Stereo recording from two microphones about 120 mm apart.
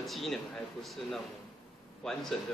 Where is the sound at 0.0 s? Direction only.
Centre (ahead or behind).